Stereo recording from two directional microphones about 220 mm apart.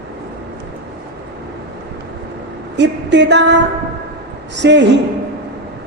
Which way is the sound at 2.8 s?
50° right (ahead or behind).